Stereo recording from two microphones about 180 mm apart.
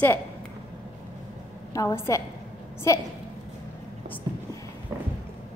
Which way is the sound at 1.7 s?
15° left (ahead or behind).